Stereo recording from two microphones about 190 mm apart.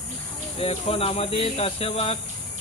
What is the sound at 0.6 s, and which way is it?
Speech, 30° left (ahead or behind).